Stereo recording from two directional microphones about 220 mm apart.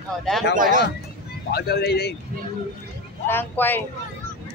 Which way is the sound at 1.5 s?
45° left (ahead or behind).